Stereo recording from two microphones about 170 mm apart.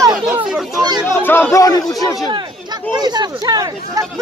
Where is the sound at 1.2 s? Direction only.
10° left (ahead or behind).